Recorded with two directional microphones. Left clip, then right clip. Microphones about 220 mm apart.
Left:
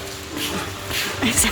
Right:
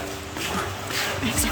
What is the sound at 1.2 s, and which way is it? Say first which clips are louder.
Speech: left 5 dB; 15° left (ahead or behind).